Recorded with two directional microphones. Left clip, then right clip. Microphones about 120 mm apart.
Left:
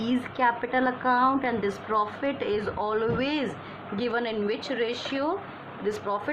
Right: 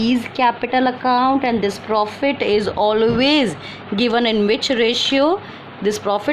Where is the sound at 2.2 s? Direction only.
85° right.